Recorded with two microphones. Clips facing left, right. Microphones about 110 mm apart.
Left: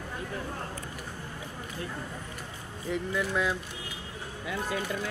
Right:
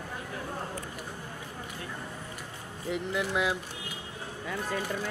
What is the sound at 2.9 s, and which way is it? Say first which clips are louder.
Speech: left 1 dB; 15° right (ahead or behind).